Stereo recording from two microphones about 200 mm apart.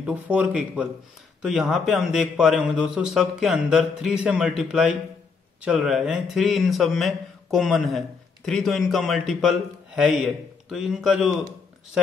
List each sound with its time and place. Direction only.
0.0 s a man's voice: 5° right (ahead or behind)